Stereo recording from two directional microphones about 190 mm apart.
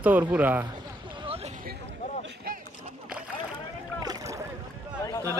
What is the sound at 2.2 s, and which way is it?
Boat, 55° right (ahead or behind).